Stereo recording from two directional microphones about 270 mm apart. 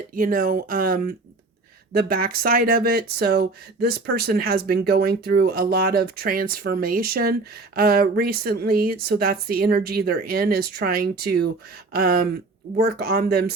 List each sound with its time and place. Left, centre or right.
0.1 s speech: right